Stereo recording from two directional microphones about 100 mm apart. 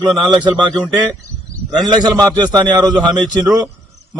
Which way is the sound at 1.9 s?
45° right (ahead or behind).